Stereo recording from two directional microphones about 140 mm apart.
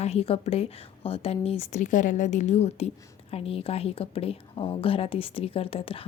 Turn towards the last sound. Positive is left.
turn(degrees=40)  # may be behind; listen again after turning